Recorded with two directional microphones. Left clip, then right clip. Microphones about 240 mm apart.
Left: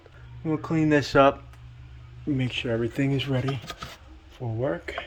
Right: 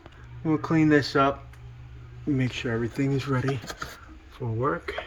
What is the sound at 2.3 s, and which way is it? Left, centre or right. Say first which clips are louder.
Speech: left 2 dB; centre.